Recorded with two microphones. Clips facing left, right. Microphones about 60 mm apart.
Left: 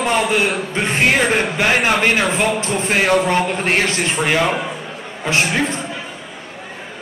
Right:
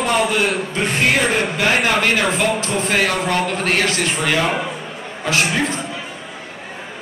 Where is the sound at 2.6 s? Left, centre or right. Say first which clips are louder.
Left 1 dB; left.